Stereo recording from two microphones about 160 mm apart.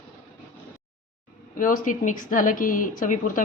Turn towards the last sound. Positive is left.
turn(degrees=55)  # may be behind; listen again after turning